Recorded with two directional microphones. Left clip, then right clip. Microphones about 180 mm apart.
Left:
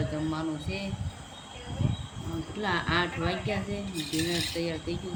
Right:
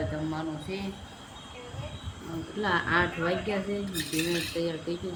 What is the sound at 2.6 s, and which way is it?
Speech, 10° left (ahead or behind).